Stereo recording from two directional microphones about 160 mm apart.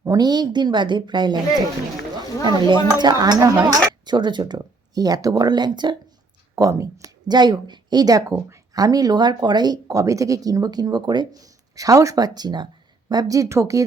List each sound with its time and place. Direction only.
0.0 s speech: 25° right (ahead or behind)
2.4 s speech: 25° right (ahead or behind)